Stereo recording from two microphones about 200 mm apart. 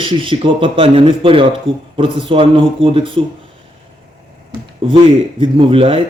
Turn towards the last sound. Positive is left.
turn(degrees=-25)  # may be behind; listen again after turning